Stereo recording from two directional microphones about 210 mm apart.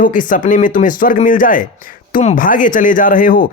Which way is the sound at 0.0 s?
40° left (ahead or behind).